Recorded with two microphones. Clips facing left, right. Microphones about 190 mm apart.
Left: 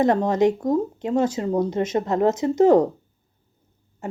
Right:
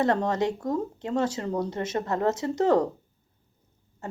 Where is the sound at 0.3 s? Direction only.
20° left (ahead or behind).